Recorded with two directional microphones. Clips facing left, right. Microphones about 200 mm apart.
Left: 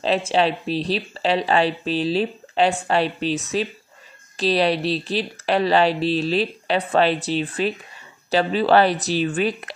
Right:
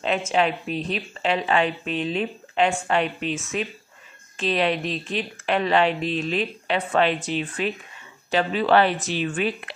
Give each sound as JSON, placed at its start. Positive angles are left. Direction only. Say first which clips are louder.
{"t": 0.0, "sound": "speech", "louder": "left 3 dB", "side_deg": 30}